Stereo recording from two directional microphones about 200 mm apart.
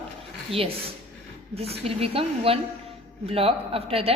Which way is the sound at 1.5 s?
30° right (ahead or behind).